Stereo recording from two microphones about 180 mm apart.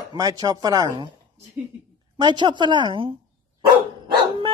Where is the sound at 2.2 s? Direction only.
25° right (ahead or behind).